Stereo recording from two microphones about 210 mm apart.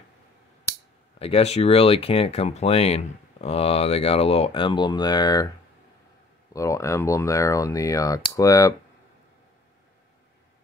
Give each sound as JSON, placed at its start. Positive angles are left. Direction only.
{"t": 1.2, "sound": "speech", "side_deg": 30}
{"t": 6.5, "sound": "speech", "side_deg": 15}